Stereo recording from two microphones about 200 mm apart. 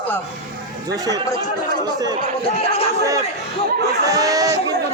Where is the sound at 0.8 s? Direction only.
20° right (ahead or behind).